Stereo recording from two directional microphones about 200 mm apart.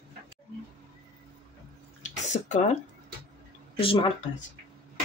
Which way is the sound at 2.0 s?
35° left (ahead or behind).